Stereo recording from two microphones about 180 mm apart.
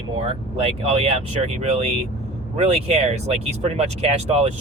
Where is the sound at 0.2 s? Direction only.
30° right (ahead or behind).